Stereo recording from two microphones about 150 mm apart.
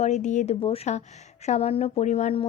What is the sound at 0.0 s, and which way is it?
A woman's voice, 50° left (ahead or behind).